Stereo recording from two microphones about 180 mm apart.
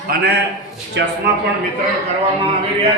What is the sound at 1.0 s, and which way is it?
Speech, 75° right (ahead or behind).